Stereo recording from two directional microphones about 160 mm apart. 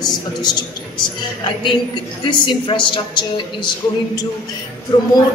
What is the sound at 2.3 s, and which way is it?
A woman's voice, 30° left (ahead or behind).